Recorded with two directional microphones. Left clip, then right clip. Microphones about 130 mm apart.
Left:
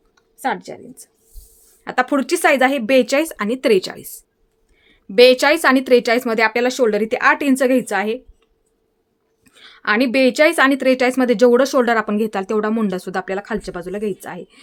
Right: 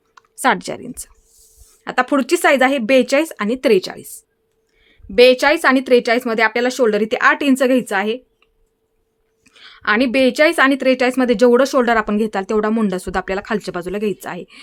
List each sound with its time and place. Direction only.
0.1 s speech: 45° right (ahead or behind)
1.8 s speech: 15° right (ahead or behind)
4.8 s a woman's voice: centre (ahead or behind); by 14.6 s 15° right (ahead or behind)